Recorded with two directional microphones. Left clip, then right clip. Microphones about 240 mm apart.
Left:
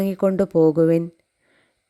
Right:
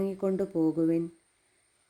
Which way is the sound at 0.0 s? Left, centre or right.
Left.